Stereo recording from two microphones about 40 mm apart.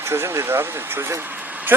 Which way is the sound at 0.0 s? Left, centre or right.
Right.